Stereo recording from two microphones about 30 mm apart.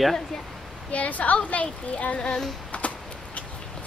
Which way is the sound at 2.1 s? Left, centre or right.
Left.